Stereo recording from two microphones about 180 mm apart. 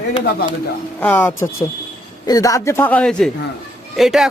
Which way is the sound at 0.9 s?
10° left (ahead or behind).